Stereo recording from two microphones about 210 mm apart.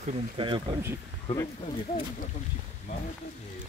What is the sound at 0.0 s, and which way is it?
Speech, 25° right (ahead or behind).